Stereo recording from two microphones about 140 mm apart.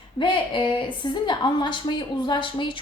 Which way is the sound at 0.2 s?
35° left (ahead or behind).